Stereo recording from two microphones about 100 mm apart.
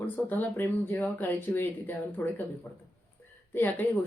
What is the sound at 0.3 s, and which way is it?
A woman's voice, 20° left (ahead or behind).